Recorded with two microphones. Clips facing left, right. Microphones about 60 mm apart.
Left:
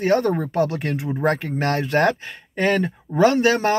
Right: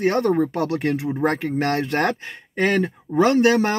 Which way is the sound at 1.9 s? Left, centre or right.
Right.